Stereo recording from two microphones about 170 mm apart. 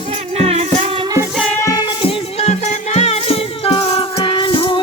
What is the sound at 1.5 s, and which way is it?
Music, 15° left (ahead or behind).